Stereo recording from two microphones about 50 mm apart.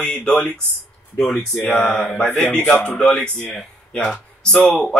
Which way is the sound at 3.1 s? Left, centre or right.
Left.